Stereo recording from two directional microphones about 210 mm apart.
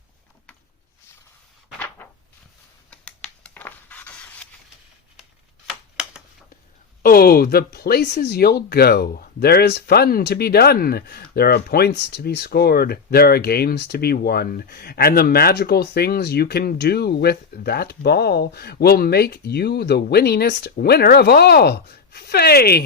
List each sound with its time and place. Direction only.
2.9 s scratch: 5° left (ahead or behind)
5.6 s a sound: 5° right (ahead or behind)
7.0 s speech: 45° left (ahead or behind)